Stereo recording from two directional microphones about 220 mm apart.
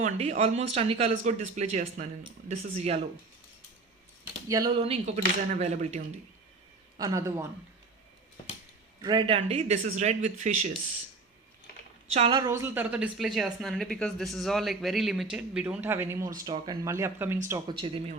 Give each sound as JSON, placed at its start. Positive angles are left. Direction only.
{"t": 0.0, "sound": "speech", "side_deg": -30}
{"t": 4.4, "sound": "speech", "side_deg": -15}
{"t": 4.8, "sound": "speech", "side_deg": -30}
{"t": 6.9, "sound": "speech", "side_deg": -15}
{"t": 9.0, "sound": "speech", "side_deg": -20}
{"t": 12.1, "sound": "a woman's voice", "side_deg": -25}